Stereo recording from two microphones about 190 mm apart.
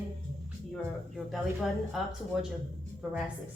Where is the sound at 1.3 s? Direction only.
Centre (ahead or behind).